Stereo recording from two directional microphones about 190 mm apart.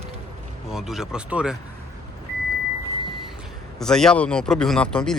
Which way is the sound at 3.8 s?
5° left (ahead or behind).